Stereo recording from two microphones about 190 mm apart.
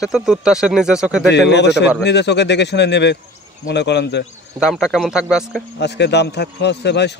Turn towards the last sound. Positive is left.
turn(degrees=65)  # may be behind; listen again after turning